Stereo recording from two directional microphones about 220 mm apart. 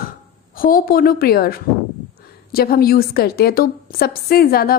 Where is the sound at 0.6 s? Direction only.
40° left (ahead or behind).